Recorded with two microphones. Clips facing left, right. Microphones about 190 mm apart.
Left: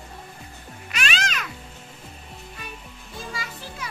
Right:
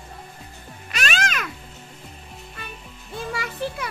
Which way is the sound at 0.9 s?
45° right (ahead or behind).